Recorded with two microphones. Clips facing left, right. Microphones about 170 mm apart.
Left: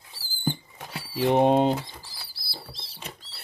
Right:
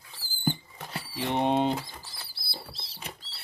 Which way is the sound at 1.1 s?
45° left (ahead or behind).